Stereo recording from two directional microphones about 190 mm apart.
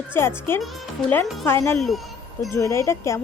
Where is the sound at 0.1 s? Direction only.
10° left (ahead or behind).